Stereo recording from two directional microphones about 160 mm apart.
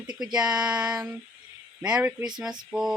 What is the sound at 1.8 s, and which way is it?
Speech, 5° right (ahead or behind).